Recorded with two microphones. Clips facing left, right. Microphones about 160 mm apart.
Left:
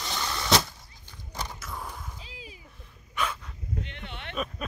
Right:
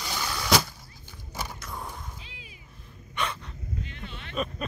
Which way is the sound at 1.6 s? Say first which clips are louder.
Even; centre (ahead or behind).